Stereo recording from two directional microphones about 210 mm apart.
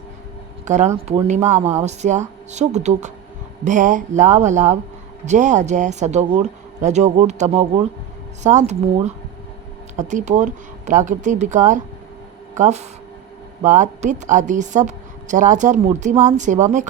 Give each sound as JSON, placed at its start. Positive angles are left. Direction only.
{"t": 0.6, "sound": "a woman's voice", "side_deg": -35}